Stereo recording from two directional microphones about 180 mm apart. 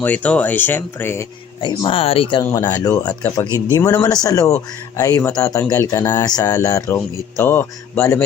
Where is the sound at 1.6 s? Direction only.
30° left (ahead or behind).